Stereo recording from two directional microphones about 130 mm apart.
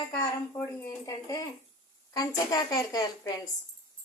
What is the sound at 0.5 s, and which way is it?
Speech, 15° left (ahead or behind).